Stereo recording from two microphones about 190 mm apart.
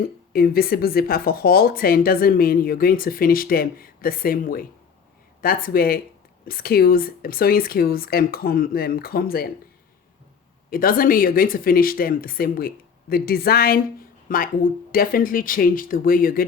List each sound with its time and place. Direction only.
0.3 s speech: 50° left (ahead or behind)
10.7 s speech: 50° left (ahead or behind)